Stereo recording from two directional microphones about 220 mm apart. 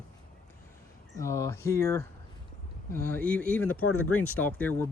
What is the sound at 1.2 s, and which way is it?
Speech, 15° left (ahead or behind).